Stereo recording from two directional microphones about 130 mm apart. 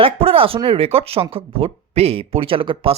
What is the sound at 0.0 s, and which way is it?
Speech, 45° right (ahead or behind).